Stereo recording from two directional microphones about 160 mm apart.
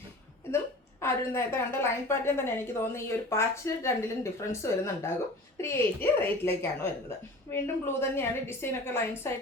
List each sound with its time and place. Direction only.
1.0 s a woman's voice: 15° left (ahead or behind)